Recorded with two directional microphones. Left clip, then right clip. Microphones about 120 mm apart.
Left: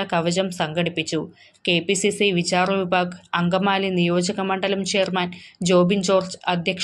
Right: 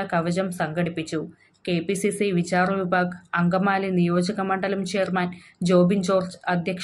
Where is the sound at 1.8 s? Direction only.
40° right (ahead or behind).